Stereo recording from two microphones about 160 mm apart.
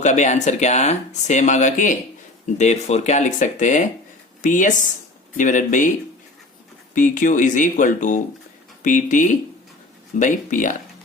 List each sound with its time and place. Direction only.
0.0 s speech: 50° left (ahead or behind)
6.9 s speech: 55° left (ahead or behind)